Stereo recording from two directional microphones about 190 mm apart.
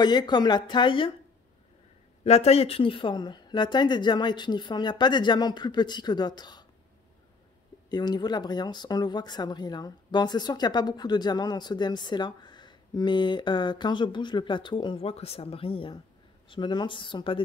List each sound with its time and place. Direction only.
0.0 s speech: 20° left (ahead or behind)
2.2 s speech: 35° left (ahead or behind)
7.9 s speech: 20° left (ahead or behind)